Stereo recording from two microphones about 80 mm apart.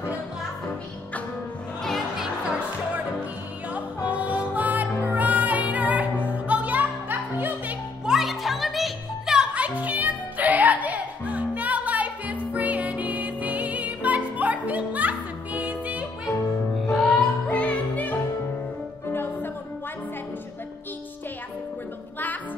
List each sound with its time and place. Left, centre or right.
1.8 s music: centre
3.7 s music: centre
8.0 s music: centre
16.7 s music: centre
17.5 s music: centre